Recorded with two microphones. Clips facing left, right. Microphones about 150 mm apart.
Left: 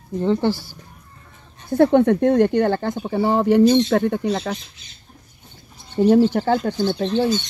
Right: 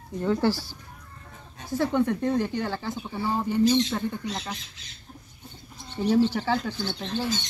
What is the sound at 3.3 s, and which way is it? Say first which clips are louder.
Speech: left 8 dB; 75° left (ahead or behind).